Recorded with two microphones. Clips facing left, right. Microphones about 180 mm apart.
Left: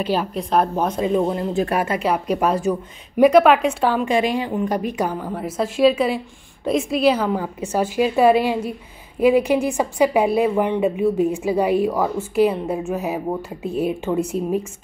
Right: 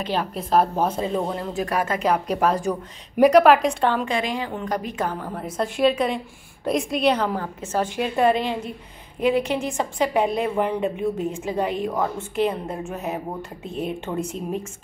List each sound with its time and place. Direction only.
0.0 s a woman's voice: 5° left (ahead or behind)
1.3 s speech: 25° left (ahead or behind)
1.8 s a woman's voice: 10° left (ahead or behind)
4.0 s a woman's voice: 15° left (ahead or behind)